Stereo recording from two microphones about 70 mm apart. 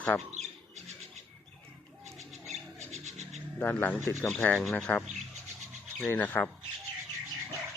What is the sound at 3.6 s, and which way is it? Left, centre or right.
Speech, left.